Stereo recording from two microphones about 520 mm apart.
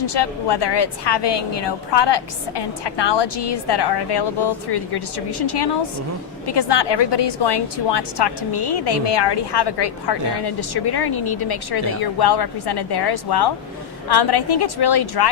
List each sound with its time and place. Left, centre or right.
0.0 s a woman's voice: left